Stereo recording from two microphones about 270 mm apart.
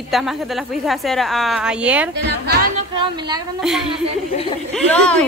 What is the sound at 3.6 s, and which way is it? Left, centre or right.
A woman's voice, centre.